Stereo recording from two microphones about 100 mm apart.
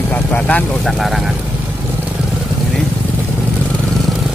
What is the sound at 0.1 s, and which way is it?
Vehicle, 15° left (ahead or behind).